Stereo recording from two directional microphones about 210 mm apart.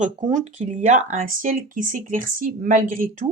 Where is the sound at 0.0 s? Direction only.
35° right (ahead or behind).